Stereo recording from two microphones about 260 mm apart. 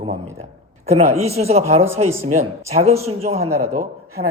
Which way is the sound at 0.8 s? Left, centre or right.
Right.